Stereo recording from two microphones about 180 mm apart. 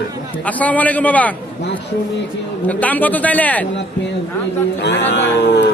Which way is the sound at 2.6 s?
10° left (ahead or behind).